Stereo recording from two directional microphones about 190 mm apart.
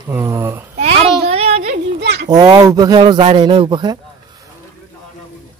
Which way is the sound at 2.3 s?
20° right (ahead or behind).